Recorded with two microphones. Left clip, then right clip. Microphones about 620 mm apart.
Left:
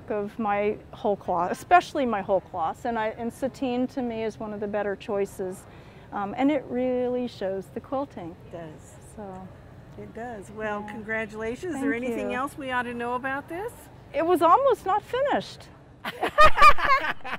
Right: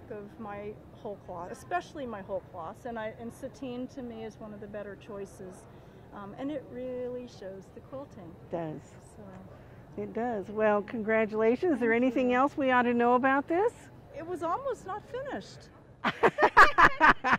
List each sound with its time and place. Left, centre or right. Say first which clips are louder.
0.1 s speech: left 15 dB; left
8.5 s a woman's voice: right 6 dB; right
10.1 s speech: right 5 dB; right
14.1 s speech: left 14 dB; left
16.0 s a sound: right 4 dB; right